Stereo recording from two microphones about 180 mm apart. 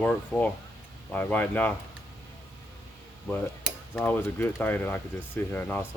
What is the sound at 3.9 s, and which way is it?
Speech, 10° left (ahead or behind).